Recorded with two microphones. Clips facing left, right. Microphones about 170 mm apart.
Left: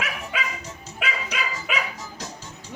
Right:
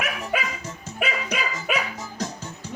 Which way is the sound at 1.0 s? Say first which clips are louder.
Right 3 dB; 45° right (ahead or behind).